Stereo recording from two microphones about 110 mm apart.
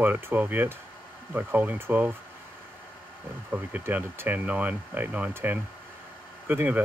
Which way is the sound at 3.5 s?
15° right (ahead or behind).